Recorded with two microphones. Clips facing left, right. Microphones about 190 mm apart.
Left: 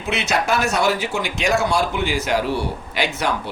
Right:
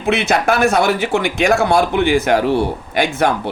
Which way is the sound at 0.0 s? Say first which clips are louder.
Right 6 dB; 55° right (ahead or behind).